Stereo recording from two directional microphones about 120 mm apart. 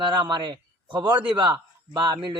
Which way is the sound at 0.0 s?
40° right (ahead or behind).